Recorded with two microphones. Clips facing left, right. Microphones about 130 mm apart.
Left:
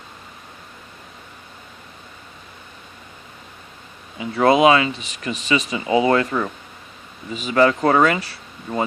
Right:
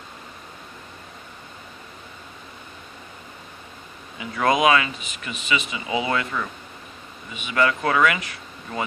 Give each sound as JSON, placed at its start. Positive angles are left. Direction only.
{"t": 4.2, "sound": "speech", "side_deg": 30}